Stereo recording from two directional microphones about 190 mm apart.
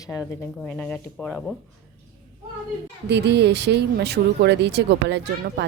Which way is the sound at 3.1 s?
60° right (ahead or behind).